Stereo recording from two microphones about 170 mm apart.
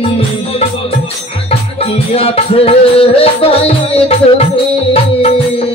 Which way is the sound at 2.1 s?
35° left (ahead or behind).